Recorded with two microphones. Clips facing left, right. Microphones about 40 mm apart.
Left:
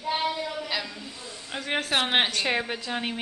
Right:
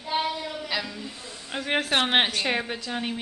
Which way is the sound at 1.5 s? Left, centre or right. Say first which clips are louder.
Right 2 dB; centre.